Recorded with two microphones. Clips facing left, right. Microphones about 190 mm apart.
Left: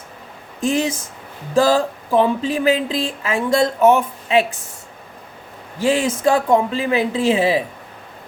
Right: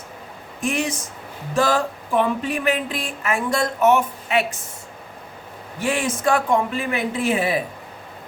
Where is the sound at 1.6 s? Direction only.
30° left (ahead or behind).